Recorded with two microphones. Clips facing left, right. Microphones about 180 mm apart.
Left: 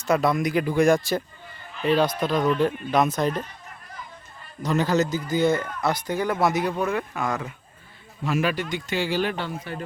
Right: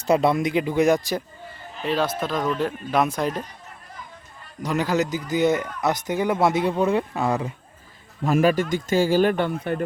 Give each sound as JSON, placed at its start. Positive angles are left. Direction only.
{"t": 0.0, "sound": "speech", "side_deg": -30}
{"t": 1.8, "sound": "speech", "side_deg": 0}
{"t": 4.6, "sound": "speech", "side_deg": -10}
{"t": 8.2, "sound": "speech", "side_deg": -45}